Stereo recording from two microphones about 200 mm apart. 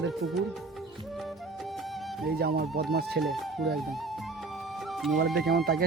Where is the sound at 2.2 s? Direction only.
50° right (ahead or behind).